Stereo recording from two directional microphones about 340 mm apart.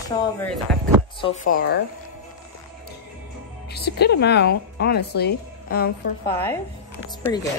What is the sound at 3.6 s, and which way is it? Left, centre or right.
A woman's voice, left.